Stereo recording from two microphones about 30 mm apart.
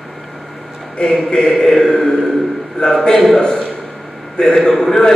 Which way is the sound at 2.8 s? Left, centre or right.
Left.